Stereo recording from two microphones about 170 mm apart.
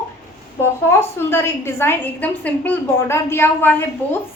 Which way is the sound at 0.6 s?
15° left (ahead or behind).